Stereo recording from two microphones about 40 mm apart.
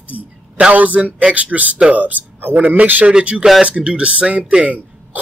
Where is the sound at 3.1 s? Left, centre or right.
Right.